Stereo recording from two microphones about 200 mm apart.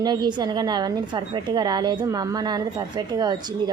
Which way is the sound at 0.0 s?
20° right (ahead or behind).